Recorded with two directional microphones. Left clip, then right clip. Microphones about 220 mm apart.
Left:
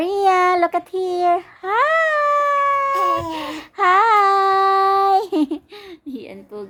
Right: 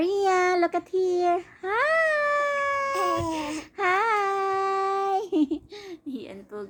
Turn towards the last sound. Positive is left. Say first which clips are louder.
# left 4 dB
turn(degrees=15)  # may be behind; listen again after turning